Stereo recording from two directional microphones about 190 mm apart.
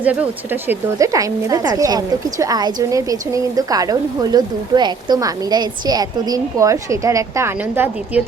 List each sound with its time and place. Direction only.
0.0 s speech: 5° right (ahead or behind)